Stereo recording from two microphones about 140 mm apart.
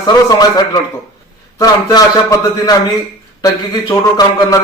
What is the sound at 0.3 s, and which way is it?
A man's voice, 30° left (ahead or behind).